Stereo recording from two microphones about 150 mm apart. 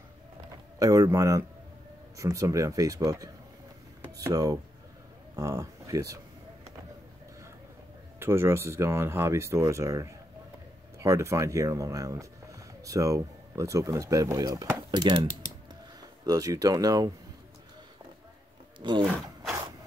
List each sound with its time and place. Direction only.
0.7 s speech: 20° right (ahead or behind)
4.3 s speech: 25° right (ahead or behind)
8.2 s speech: 15° right (ahead or behind)
16.3 s speech: 25° right (ahead or behind)
18.8 s speech: 30° right (ahead or behind)